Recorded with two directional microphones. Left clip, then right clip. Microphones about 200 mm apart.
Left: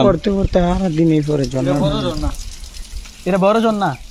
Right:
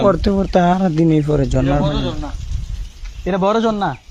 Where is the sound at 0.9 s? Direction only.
35° right (ahead or behind).